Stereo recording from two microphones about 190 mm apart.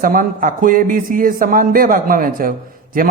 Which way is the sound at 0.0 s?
50° right (ahead or behind).